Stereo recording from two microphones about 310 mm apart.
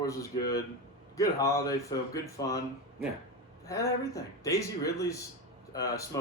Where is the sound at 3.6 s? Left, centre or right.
Centre.